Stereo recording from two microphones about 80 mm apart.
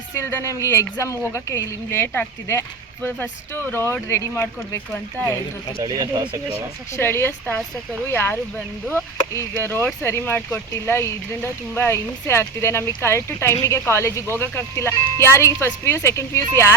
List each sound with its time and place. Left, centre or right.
0.1 s a woman's voice: left
5.8 s speech: right
6.9 s a woman's voice: left
9.6 s a woman's voice: left